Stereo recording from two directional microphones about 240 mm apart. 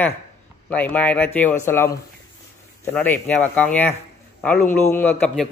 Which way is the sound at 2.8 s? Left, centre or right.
Centre.